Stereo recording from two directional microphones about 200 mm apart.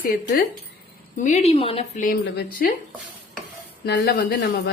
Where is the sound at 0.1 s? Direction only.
50° left (ahead or behind).